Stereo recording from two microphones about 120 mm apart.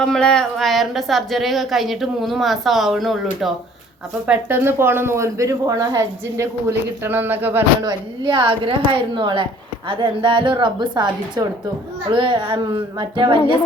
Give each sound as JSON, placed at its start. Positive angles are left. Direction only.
{"t": 0.0, "sound": "speech", "side_deg": 5}
{"t": 4.3, "sound": "speech", "side_deg": -15}
{"t": 7.8, "sound": "a woman's voice", "side_deg": -40}